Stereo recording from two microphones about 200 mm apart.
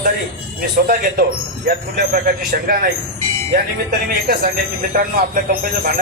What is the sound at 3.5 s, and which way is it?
Speech, 50° right (ahead or behind).